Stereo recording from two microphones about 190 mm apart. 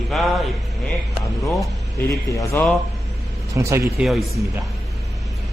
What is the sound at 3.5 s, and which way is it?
Speech, 15° right (ahead or behind).